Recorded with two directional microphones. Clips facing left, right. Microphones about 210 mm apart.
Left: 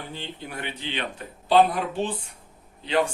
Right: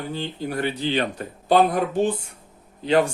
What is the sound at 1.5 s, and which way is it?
Speech, 45° right (ahead or behind).